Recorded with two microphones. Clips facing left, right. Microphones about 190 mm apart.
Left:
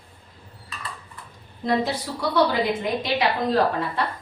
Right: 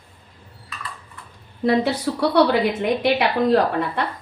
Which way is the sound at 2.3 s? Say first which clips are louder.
Right 3 dB; 70° right (ahead or behind).